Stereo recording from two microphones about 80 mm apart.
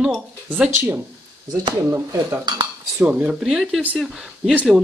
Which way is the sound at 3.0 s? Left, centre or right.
Centre.